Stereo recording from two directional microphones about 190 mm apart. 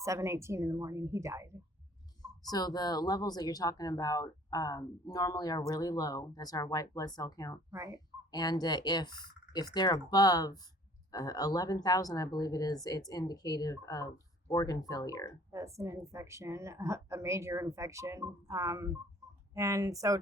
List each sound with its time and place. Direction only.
0.0 s a woman's voice: 15° right (ahead or behind)
2.2 s speech: 20° left (ahead or behind)
7.7 s a woman's voice: 15° right (ahead or behind)
7.9 s speech: 20° left (ahead or behind)
15.5 s a woman's voice: 15° right (ahead or behind)